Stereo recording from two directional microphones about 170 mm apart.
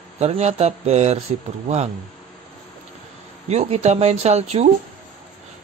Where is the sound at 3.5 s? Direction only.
40° right (ahead or behind).